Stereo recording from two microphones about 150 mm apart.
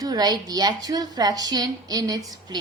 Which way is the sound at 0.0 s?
25° right (ahead or behind).